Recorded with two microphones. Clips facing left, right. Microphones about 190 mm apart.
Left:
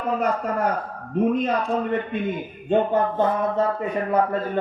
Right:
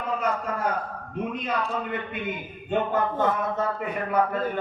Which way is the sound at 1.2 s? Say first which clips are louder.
Left 8 dB; 40° left (ahead or behind).